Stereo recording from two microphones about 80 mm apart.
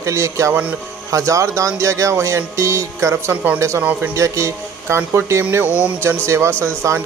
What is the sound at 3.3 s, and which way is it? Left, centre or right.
Speech, centre.